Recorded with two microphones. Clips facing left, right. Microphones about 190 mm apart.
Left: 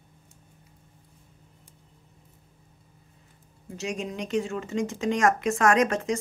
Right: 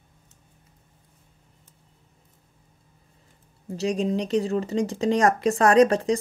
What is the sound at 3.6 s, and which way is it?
Speech, 35° right (ahead or behind).